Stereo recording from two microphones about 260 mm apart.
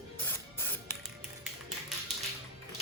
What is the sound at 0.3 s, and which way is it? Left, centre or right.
Spray, centre.